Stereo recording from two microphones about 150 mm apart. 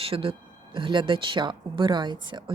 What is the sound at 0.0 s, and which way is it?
Speech, 40° right (ahead or behind).